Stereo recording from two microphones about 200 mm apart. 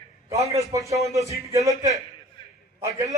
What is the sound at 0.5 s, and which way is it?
Speech, 15° right (ahead or behind).